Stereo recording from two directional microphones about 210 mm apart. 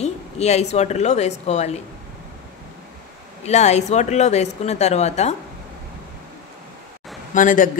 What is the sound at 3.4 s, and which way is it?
A woman's voice, 30° left (ahead or behind).